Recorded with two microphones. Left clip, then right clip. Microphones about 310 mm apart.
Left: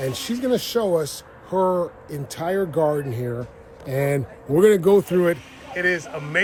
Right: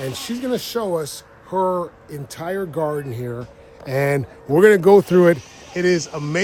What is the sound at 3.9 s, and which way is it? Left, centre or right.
Speech, centre.